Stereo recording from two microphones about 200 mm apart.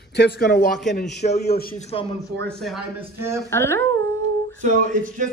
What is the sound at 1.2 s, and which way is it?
Speech, 40° left (ahead or behind).